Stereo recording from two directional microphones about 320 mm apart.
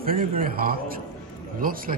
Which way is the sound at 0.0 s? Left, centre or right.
Right.